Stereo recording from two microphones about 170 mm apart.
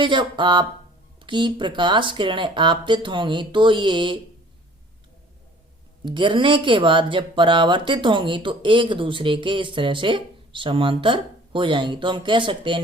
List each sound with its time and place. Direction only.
0.0 s speech: 30° right (ahead or behind)
6.1 s speech: 30° right (ahead or behind)